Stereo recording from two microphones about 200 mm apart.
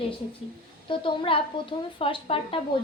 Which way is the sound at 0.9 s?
25° left (ahead or behind).